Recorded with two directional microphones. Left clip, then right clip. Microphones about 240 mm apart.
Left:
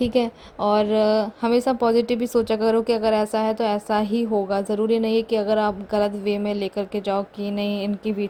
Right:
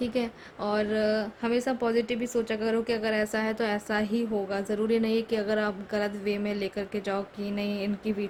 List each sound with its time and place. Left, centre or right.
0.0 s a woman's voice: left